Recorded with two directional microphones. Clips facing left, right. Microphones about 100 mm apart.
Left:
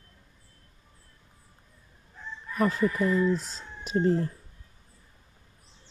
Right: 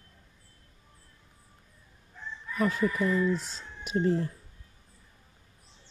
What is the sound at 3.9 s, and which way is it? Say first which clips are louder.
Speech: left 2 dB; 40° left (ahead or behind).